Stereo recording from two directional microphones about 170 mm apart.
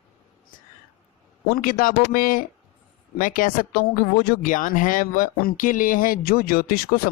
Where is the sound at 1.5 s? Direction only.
55° left (ahead or behind).